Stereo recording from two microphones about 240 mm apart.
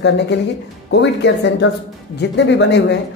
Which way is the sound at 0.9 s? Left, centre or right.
Left.